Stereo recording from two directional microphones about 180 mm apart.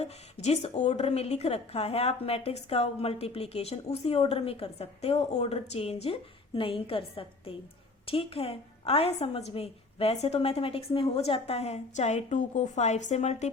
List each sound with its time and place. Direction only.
0.0 s a woman's voice: 35° left (ahead or behind)